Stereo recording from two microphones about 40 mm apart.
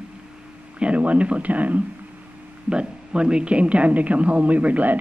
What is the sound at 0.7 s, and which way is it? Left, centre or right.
Speech, right.